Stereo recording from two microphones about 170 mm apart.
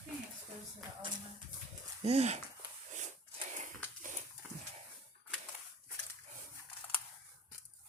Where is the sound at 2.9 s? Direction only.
45° right (ahead or behind).